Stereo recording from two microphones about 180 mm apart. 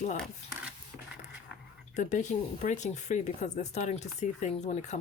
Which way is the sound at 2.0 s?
45° left (ahead or behind).